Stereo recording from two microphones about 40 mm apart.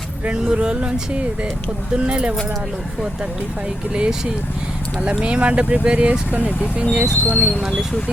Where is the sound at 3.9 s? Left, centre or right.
Right.